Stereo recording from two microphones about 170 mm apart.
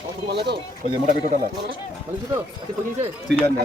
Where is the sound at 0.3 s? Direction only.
80° right.